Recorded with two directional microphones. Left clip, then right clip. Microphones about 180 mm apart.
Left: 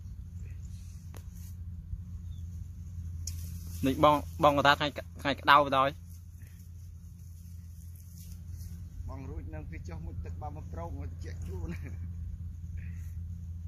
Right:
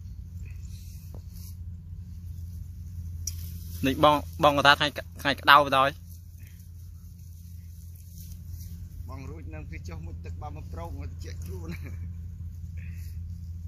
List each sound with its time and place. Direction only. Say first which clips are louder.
3.8 s speech: right 3 dB; centre (ahead or behind)
9.0 s a sound: right 2 dB; 25° left (ahead or behind)
12.7 s rumble: right 3 dB; 25° left (ahead or behind)